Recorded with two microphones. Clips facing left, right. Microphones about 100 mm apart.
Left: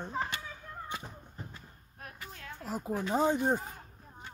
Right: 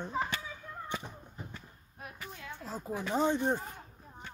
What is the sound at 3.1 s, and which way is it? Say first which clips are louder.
Speech: left 1 dB; 10° left (ahead or behind).